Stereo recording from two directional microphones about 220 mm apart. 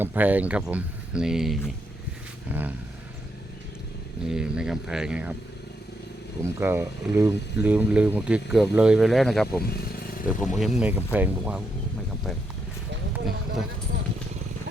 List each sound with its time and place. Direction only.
0.0 s speech: 10° right (ahead or behind)
2.5 s vehicle: 5° right (ahead or behind)
4.3 s speech: 5° right (ahead or behind)
6.4 s speech: 10° right (ahead or behind)
9.6 s motorcycle: 45° left (ahead or behind)
10.4 s speech: centre (ahead or behind)